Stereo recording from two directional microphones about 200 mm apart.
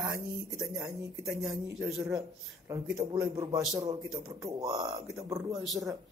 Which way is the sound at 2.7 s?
15° right (ahead or behind).